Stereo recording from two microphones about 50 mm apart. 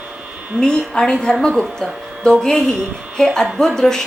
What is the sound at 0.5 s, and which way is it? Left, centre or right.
Speech, centre.